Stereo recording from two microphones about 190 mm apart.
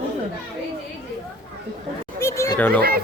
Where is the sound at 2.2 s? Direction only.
15° left (ahead or behind).